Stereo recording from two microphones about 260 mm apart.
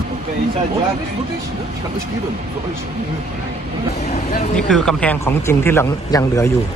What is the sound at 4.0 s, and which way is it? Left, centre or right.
Vehicle, left.